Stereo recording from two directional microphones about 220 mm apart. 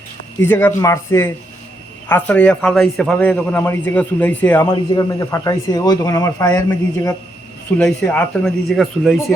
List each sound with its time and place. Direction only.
0.4 s a man's voice: 10° left (ahead or behind)